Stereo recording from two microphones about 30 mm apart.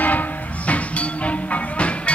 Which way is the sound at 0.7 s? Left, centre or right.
Left.